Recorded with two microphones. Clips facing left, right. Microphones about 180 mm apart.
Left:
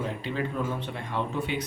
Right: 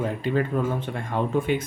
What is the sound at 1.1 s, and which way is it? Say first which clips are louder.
Speech: right 6 dB; 50° right (ahead or behind).